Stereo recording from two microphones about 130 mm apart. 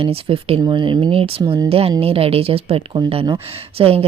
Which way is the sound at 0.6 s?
35° right (ahead or behind).